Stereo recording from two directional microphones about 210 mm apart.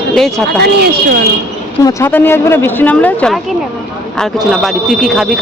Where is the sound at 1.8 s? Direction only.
15° left (ahead or behind).